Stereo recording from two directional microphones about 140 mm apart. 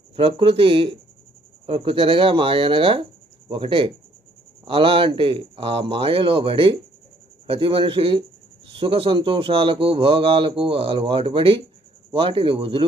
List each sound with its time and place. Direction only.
0.2 s speech: 40° right (ahead or behind)